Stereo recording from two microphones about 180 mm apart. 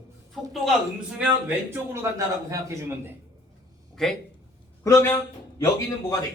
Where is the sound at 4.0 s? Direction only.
Centre (ahead or behind).